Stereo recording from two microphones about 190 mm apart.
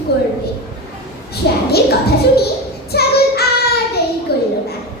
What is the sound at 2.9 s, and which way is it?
Child singing, 55° left (ahead or behind).